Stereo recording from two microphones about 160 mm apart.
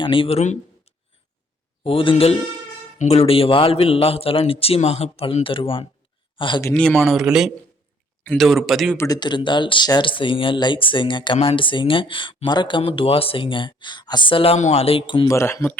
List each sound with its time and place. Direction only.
0.0 s speech: 35° left (ahead or behind)
1.8 s speech: 35° left (ahead or behind)
6.7 s a man's voice: 5° left (ahead or behind)
9.0 s speech: 25° left (ahead or behind)
15.3 s speech: 15° left (ahead or behind)